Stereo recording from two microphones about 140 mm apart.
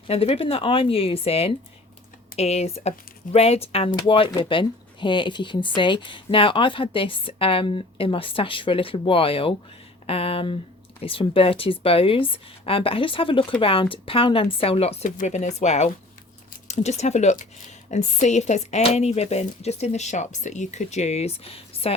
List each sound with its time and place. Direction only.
0.1 s speech: 45° left (ahead or behind)